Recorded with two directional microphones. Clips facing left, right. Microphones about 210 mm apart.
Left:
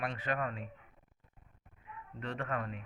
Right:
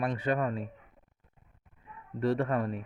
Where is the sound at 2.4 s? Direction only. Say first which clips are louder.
Right 8 dB; 30° right (ahead or behind).